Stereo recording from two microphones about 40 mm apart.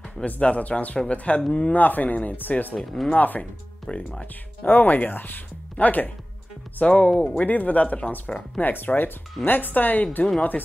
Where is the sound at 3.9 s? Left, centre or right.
Left.